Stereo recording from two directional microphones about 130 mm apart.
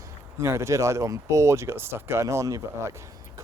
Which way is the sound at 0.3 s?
20° right (ahead or behind).